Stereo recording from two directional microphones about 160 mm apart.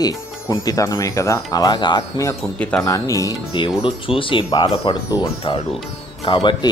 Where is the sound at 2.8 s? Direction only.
20° left (ahead or behind).